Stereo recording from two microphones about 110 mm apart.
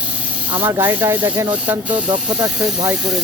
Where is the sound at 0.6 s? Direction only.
20° right (ahead or behind).